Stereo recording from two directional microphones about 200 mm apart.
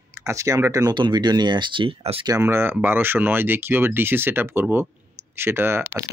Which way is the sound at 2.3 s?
10° right (ahead or behind).